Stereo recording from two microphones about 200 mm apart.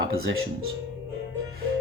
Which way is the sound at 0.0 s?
60° right (ahead or behind).